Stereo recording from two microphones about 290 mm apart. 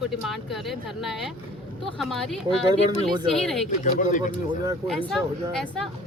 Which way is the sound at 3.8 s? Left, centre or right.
Left.